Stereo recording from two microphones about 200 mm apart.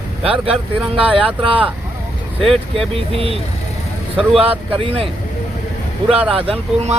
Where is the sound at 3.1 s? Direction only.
30° right (ahead or behind).